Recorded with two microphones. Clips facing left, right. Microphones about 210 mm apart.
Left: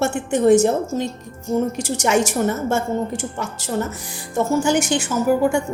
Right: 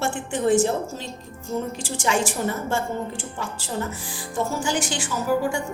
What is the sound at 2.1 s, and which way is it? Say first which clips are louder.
Speech: left 5 dB; 65° left (ahead or behind).